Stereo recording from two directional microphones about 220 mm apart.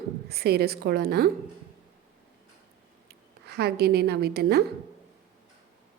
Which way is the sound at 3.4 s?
45° right (ahead or behind).